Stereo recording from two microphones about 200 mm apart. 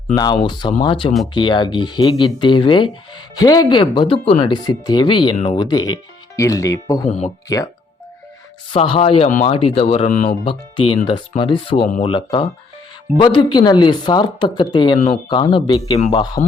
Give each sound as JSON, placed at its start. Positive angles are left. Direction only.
{"t": 0.1, "sound": "speech", "side_deg": 20}
{"t": 8.7, "sound": "speech", "side_deg": 30}
{"t": 10.1, "sound": "speech", "side_deg": 40}
{"t": 10.4, "sound": "speech", "side_deg": 25}
{"t": 14.9, "sound": "speech", "side_deg": 35}
{"t": 15.3, "sound": "speech", "side_deg": 25}